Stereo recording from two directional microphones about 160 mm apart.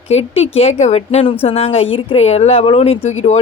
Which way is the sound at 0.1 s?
40° left (ahead or behind).